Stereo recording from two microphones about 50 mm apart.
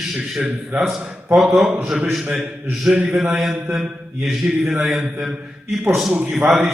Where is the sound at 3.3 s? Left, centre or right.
Centre.